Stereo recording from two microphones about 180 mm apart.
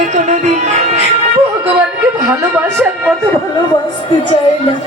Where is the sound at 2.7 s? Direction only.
5° right (ahead or behind).